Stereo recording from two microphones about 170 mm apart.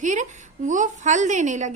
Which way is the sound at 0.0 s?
45° right (ahead or behind).